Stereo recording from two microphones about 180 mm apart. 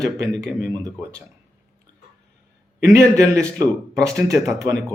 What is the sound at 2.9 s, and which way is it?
A man's voice, 15° right (ahead or behind).